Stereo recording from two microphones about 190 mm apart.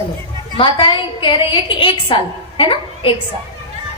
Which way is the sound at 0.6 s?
25° left (ahead or behind).